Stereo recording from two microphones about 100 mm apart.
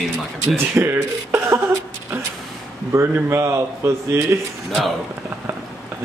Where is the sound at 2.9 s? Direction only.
25° right (ahead or behind).